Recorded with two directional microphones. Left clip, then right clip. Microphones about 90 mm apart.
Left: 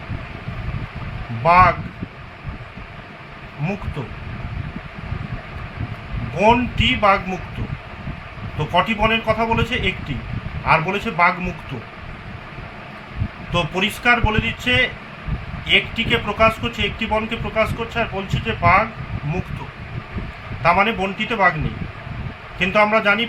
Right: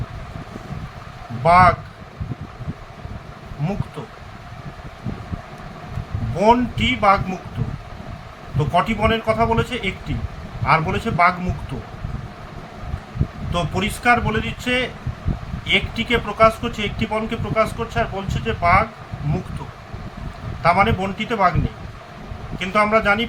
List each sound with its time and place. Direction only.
1.5 s a man's voice: 10° left (ahead or behind)
6.4 s a man's voice: 20° left (ahead or behind)
8.5 s a man's voice: 20° left (ahead or behind)
13.5 s a man's voice: 20° left (ahead or behind)
20.6 s a man's voice: 15° left (ahead or behind)
22.5 s a man's voice: 20° left (ahead or behind)